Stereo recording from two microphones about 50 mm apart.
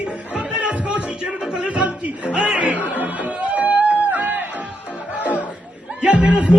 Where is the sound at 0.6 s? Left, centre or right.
Right.